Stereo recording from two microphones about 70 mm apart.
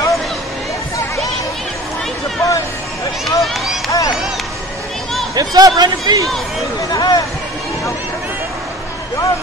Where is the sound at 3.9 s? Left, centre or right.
Left.